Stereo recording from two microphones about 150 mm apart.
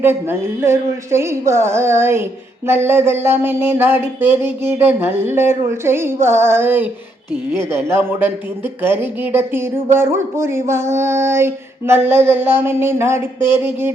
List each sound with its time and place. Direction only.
0.0 s speech: 15° right (ahead or behind)